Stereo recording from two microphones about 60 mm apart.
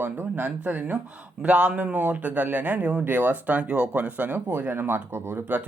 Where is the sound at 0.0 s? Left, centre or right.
Right.